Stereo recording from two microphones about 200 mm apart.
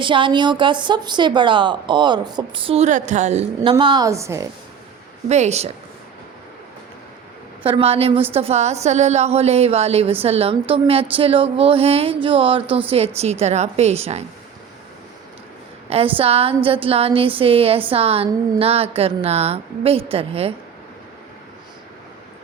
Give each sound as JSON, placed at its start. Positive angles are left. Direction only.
{"t": 0.0, "sound": "a woman's voice", "side_deg": -25}
{"t": 5.3, "sound": "speech", "side_deg": -35}
{"t": 7.6, "sound": "a woman's voice", "side_deg": -30}
{"t": 15.9, "sound": "a woman's voice", "side_deg": -30}